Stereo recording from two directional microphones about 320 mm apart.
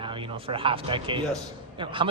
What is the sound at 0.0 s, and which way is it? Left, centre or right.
Speech, centre.